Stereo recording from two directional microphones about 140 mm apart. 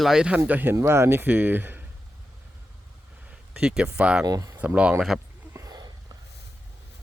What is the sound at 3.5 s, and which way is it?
Speech, 5° right (ahead or behind).